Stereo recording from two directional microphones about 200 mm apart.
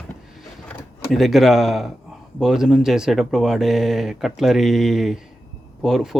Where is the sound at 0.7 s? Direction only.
Centre (ahead or behind).